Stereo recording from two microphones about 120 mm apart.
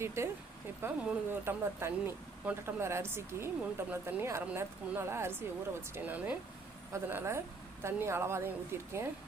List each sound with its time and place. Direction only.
0.0 s speech: 20° right (ahead or behind)